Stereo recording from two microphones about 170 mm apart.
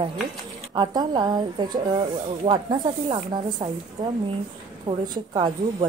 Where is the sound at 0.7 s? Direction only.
25° right (ahead or behind).